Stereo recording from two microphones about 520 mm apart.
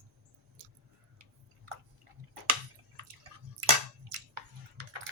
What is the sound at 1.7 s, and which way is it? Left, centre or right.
Chewing, right.